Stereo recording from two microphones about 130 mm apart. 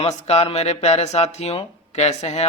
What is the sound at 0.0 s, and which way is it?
Speech, 55° left (ahead or behind).